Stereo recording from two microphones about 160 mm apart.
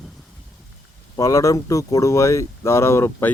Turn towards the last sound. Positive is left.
turn(degrees=15)  # may be behind; listen again after turning